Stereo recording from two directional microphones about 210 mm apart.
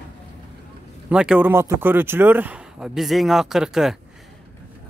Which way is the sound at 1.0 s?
5° right (ahead or behind).